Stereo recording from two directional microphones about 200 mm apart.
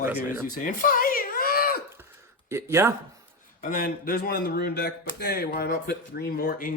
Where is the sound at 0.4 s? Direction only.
45° left (ahead or behind).